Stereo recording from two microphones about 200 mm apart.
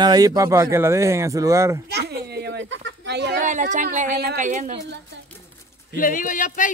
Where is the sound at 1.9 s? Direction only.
55° right (ahead or behind).